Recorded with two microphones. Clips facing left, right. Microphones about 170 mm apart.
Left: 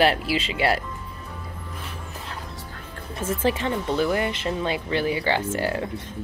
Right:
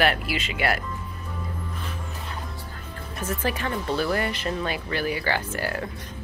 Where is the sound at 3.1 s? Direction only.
25° left (ahead or behind).